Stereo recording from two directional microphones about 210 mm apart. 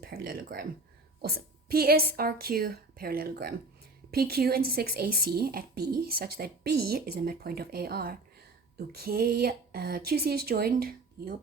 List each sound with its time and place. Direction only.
0.0 s a woman's voice: 45° right (ahead or behind)